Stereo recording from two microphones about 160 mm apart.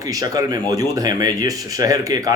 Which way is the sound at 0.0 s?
20° right (ahead or behind).